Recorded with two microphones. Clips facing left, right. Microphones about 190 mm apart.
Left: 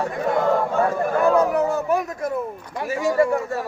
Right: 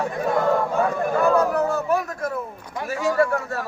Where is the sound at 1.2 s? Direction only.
20° left (ahead or behind).